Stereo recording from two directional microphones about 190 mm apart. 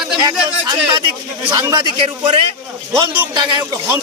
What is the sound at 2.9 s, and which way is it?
Speech, 10° right (ahead or behind).